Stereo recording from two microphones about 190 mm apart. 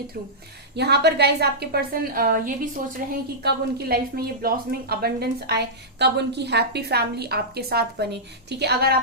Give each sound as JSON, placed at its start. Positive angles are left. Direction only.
{"t": 0.8, "sound": "a woman's voice", "side_deg": -60}